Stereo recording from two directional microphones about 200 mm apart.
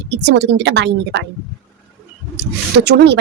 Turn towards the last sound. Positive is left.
turn(degrees=-60)  # may be behind; listen again after turning